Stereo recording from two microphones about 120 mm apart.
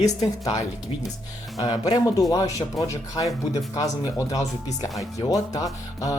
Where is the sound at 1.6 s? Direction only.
35° left (ahead or behind).